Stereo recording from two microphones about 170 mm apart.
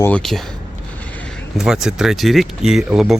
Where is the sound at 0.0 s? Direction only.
5° left (ahead or behind).